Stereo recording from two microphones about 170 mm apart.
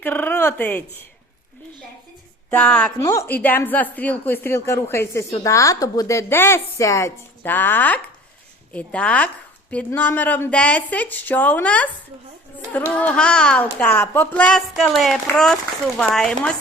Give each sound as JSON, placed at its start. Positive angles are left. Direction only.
{"t": 0.0, "sound": "speech", "side_deg": 10}
{"t": 2.5, "sound": "speech", "side_deg": 5}
{"t": 3.0, "sound": "speech", "side_deg": 20}